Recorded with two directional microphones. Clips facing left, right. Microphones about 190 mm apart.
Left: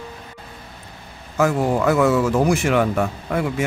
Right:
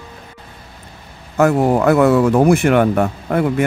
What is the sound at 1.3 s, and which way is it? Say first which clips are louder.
Speech: right 5 dB; 60° right (ahead or behind).